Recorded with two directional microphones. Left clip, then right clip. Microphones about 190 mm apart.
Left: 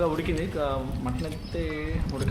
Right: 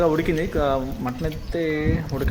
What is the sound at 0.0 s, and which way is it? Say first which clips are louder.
Speech: right 6 dB; 30° right (ahead or behind).